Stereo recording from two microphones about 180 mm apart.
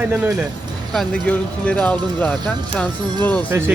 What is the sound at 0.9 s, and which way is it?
Speech, 5° left (ahead or behind).